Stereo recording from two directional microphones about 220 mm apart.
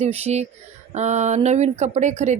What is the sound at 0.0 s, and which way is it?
Speech, 30° right (ahead or behind).